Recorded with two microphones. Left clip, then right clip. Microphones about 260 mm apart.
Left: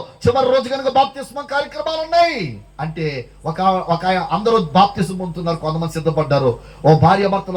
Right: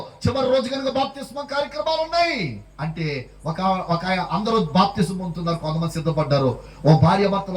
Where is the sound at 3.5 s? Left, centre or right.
Centre.